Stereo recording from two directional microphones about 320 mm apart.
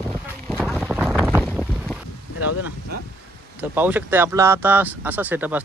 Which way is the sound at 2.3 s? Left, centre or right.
Left.